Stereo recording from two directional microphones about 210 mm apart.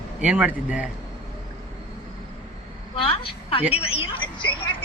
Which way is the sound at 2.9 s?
25° left (ahead or behind).